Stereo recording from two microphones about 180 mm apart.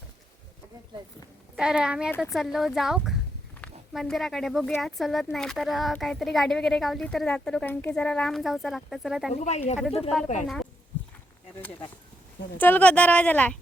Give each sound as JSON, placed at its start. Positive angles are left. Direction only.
{"t": 1.5, "sound": "speech", "side_deg": -5}
{"t": 9.3, "sound": "speech", "side_deg": 40}
{"t": 10.4, "sound": "speech", "side_deg": 0}
{"t": 12.5, "sound": "speech", "side_deg": 10}